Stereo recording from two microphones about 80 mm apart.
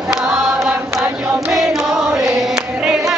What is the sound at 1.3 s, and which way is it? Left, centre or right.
Chant, centre.